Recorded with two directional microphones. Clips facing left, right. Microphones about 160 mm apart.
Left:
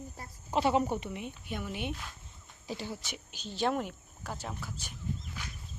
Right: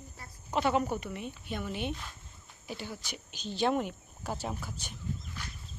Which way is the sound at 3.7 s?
Centre (ahead or behind).